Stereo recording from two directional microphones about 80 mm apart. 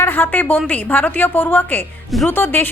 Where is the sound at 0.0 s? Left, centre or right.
Left.